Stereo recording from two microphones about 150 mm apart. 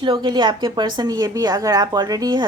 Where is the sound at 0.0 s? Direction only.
30° right (ahead or behind).